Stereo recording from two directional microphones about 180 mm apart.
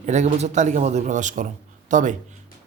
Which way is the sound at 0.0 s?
40° right (ahead or behind).